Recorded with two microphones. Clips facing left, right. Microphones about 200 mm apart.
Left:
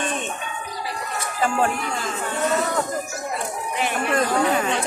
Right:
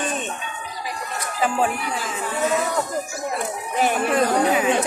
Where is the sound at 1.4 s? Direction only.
5° right (ahead or behind).